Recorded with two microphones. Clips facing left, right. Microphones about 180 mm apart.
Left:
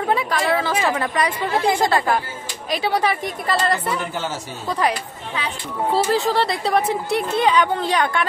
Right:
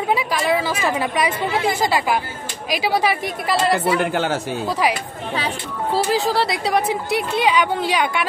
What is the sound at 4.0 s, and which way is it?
Speech, 65° right (ahead or behind).